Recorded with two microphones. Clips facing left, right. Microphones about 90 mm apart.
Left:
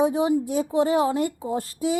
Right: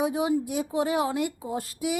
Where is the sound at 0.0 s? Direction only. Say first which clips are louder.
Left 4 dB; 25° left (ahead or behind).